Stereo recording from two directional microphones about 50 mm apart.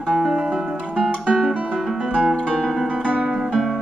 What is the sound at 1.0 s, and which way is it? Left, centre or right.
Guitar, centre.